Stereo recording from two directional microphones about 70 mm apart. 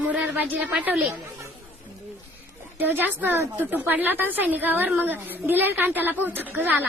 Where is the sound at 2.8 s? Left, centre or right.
Right.